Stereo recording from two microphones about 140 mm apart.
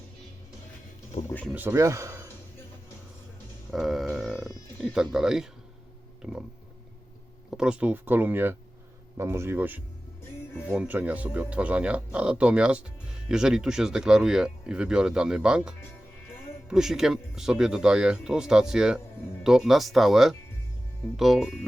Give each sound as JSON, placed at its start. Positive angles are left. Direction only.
{"t": 1.5, "sound": "speech", "side_deg": -20}
{"t": 3.7, "sound": "a sound", "side_deg": 0}
{"t": 4.4, "sound": "music", "side_deg": -5}
{"t": 5.1, "sound": "speech", "side_deg": -5}
{"t": 6.2, "sound": "speech", "side_deg": -15}
{"t": 7.5, "sound": "speech", "side_deg": -5}